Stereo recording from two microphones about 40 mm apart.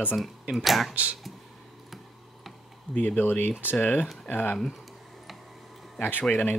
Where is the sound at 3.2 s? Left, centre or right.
Left.